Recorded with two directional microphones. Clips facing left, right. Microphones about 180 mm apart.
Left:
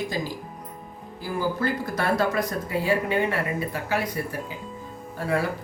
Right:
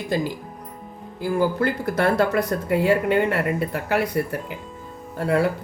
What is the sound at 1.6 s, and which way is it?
Speech, 60° right (ahead or behind).